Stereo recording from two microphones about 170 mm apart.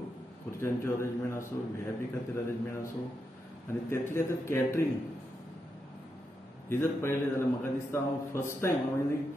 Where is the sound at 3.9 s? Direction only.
15° left (ahead or behind).